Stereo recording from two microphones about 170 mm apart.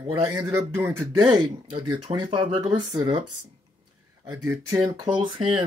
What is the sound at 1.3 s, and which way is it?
Speech, 30° right (ahead or behind).